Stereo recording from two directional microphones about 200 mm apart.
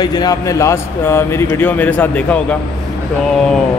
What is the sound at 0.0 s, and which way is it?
A man's voice, 20° left (ahead or behind).